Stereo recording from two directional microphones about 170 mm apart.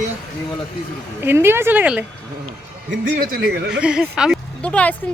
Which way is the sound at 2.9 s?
80° right.